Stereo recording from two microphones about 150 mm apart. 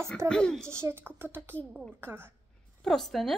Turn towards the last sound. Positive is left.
turn(degrees=0)  # may be behind; listen again after turning